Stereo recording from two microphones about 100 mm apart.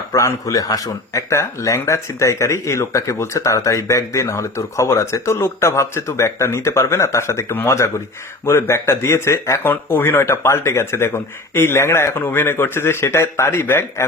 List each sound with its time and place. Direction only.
0.1 s speech: 30° left (ahead or behind)